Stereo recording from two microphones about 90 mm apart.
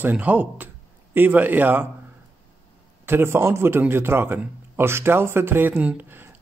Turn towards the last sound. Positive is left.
turn(degrees=-20)  # may be behind; listen again after turning